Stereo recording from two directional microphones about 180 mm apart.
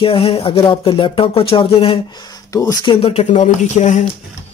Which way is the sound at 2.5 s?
20° left (ahead or behind).